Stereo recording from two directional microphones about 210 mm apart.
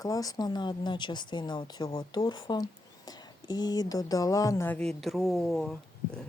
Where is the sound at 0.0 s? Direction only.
15° left (ahead or behind).